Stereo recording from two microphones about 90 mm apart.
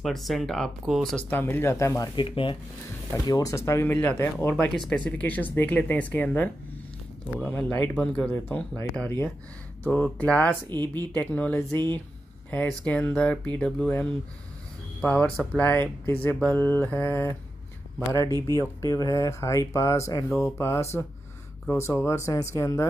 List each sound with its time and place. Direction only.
0.0 s speech: centre (ahead or behind)
1.3 s speech: 25° left (ahead or behind)
2.1 s speech: 75° left (ahead or behind)
3.3 s speech: 40° left (ahead or behind); by 4.6 s 25° left (ahead or behind)
4.7 s speech: 10° left (ahead or behind)
10.7 s speech: 50° right (ahead or behind)
11.1 s speech: 20° left (ahead or behind)
12.4 s speech: 15° left (ahead or behind)
15.0 s speech: 10° left (ahead or behind)
18.1 s speech: 35° left (ahead or behind)